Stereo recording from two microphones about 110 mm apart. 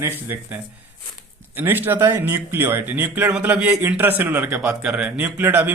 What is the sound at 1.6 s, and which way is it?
A man's voice, 20° right (ahead or behind).